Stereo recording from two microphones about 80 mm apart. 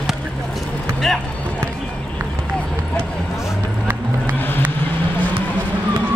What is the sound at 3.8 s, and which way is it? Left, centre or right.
Run, right.